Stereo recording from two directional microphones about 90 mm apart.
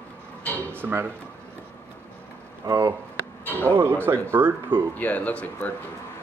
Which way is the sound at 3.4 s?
20° left (ahead or behind).